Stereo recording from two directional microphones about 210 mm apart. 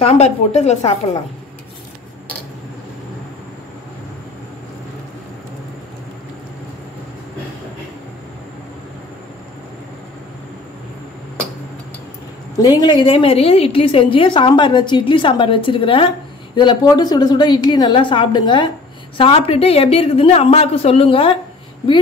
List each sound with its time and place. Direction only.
0.0 s a woman's voice: 30° left (ahead or behind)
12.6 s a woman's voice: 20° left (ahead or behind)